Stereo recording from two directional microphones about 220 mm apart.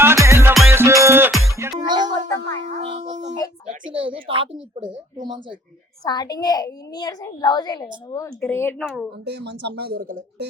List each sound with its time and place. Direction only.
0.0 s music: 10° right (ahead or behind)
2.3 s music: 15° left (ahead or behind)
2.7 s music: 25° right (ahead or behind)
3.8 s speech: 25° right (ahead or behind)
6.1 s a woman's voice: 20° left (ahead or behind)
9.2 s speech: 50° right (ahead or behind)